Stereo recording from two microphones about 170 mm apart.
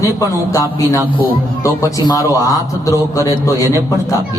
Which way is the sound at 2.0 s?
20° left (ahead or behind).